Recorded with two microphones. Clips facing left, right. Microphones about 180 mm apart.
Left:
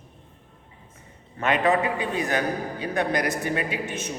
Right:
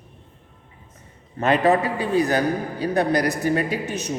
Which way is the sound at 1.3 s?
35° right (ahead or behind).